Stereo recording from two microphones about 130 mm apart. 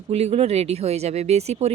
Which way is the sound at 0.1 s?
55° right (ahead or behind).